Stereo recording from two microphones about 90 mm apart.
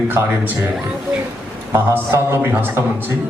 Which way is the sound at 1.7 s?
25° right (ahead or behind).